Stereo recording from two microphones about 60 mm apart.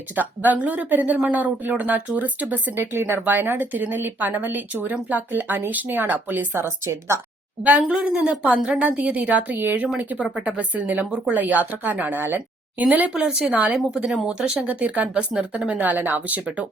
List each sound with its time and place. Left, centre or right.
0.2 s a woman's voice: right
7.8 s a woman's voice: centre; by 12.4 s right
12.8 s a woman's voice: right
13.7 s a woman's voice: centre
15.8 s a woman's voice: right